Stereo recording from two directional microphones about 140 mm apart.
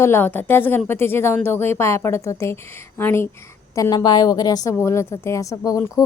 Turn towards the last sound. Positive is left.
turn(degrees=25)  # may be behind; listen again after turning